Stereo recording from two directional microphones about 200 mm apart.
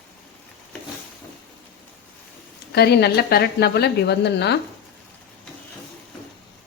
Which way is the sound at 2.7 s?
55° left (ahead or behind).